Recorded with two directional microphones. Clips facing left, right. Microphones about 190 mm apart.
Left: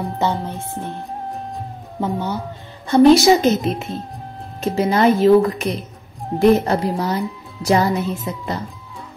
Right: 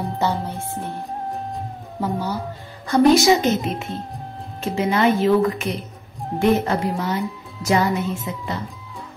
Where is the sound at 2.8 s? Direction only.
30° left (ahead or behind).